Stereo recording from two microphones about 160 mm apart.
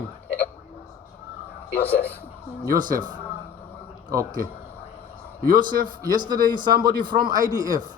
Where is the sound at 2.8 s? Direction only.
60° right (ahead or behind).